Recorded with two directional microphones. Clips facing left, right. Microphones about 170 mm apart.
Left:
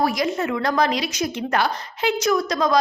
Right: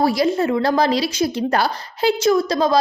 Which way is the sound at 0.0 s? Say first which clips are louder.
Right 4 dB; 30° right (ahead or behind).